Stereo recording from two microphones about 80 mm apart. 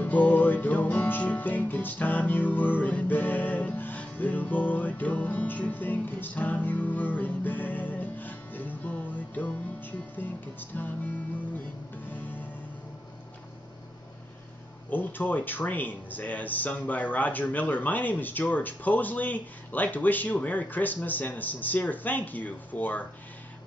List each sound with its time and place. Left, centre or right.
0.0 s music: centre
14.9 s music: left